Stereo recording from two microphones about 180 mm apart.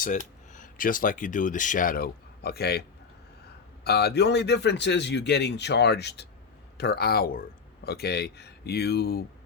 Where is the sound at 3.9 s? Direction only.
65° left (ahead or behind).